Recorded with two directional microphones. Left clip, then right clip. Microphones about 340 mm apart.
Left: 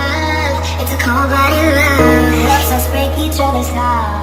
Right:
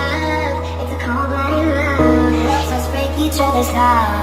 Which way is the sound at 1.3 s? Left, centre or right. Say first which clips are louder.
Left 5 dB; left.